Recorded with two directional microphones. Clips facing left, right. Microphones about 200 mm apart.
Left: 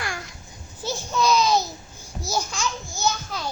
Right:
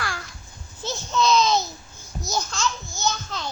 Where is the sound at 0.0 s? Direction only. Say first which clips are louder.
Even; 20° left (ahead or behind).